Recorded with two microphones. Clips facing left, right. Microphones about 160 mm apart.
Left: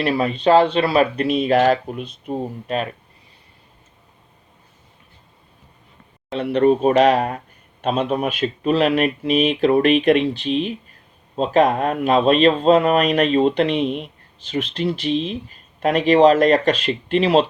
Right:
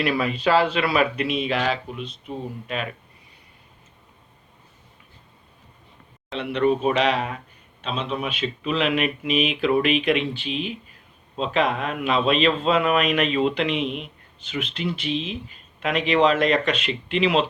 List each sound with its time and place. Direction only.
0.0 s speech: 35° left (ahead or behind)
6.3 s speech: 40° left (ahead or behind)